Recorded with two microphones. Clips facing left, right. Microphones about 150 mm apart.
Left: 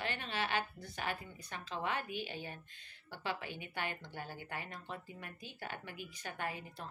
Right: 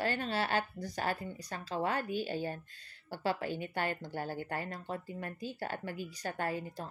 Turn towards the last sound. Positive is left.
turn(degrees=-40)  # may be behind; listen again after turning